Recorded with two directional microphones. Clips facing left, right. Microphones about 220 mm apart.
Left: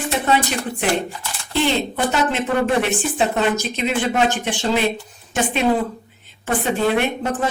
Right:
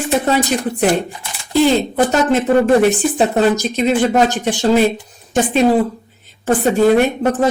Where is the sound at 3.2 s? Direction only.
40° right (ahead or behind).